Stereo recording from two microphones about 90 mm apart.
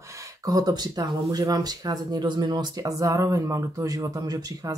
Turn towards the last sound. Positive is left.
turn(degrees=-45)  # may be behind; listen again after turning